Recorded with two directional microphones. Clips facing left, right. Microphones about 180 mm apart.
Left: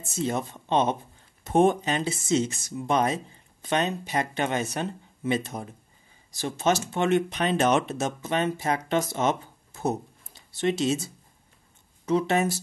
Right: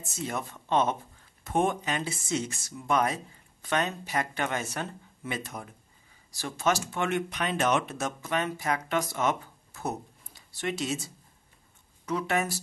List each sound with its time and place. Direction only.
0.0 s speech: 25° left (ahead or behind)
12.1 s speech: 25° left (ahead or behind)